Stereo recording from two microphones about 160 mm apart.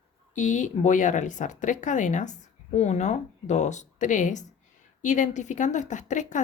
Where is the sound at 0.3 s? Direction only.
50° left (ahead or behind).